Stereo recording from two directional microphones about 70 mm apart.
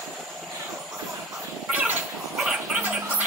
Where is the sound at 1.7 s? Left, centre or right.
Right.